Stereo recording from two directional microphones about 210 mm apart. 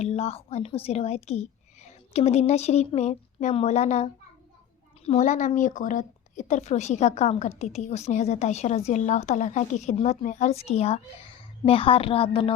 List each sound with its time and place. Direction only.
0.0 s speech: 30° left (ahead or behind)